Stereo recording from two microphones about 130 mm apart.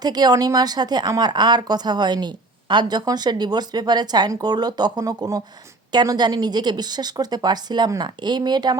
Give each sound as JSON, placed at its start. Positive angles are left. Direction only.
{"t": 0.0, "sound": "a woman's voice", "side_deg": -30}